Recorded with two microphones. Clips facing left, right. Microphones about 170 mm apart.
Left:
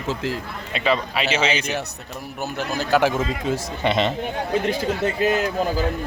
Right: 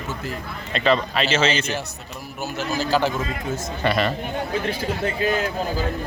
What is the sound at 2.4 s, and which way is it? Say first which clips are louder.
Speech: even; 60° left (ahead or behind).